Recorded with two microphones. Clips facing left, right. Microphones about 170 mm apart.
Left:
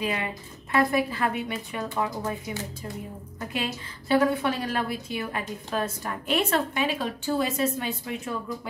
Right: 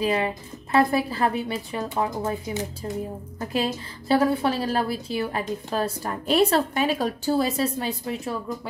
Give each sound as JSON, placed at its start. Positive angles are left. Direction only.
{"t": 0.0, "sound": "a woman's voice", "side_deg": -35}